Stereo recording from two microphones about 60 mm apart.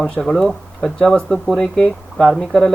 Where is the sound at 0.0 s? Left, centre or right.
Centre.